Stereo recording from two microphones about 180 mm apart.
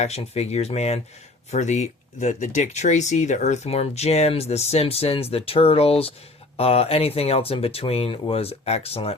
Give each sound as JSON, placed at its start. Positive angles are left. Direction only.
{"t": 0.0, "sound": "speech", "side_deg": 35}